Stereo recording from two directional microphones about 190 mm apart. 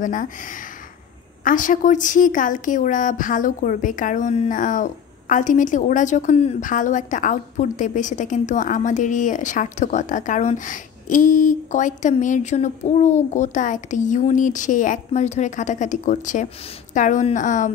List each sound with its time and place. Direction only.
0.0 s a woman's voice: 45° left (ahead or behind)